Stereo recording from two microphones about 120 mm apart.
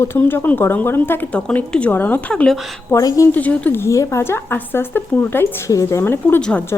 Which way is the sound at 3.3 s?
10° left (ahead or behind).